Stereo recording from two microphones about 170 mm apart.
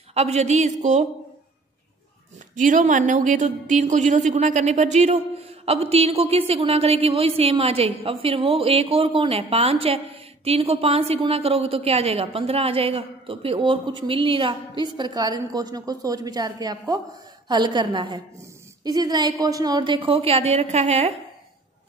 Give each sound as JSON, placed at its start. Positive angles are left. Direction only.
{"t": 0.1, "sound": "speech", "side_deg": -40}
{"t": 2.5, "sound": "a woman's voice", "side_deg": -50}